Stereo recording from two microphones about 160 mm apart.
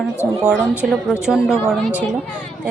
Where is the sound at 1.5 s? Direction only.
15° left (ahead or behind).